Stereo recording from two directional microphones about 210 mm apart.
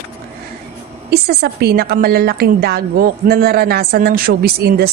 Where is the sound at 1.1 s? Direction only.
50° right (ahead or behind).